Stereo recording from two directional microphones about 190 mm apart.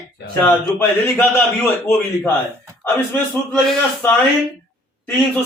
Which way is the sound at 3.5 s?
10° left (ahead or behind).